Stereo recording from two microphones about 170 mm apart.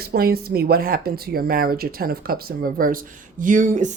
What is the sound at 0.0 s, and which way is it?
Speech, 65° right (ahead or behind).